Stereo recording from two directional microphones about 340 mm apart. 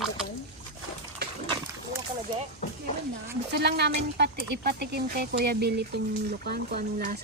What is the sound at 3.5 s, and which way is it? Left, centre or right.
Speech, right.